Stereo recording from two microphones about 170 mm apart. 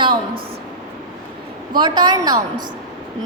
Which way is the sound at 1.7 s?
25° right (ahead or behind).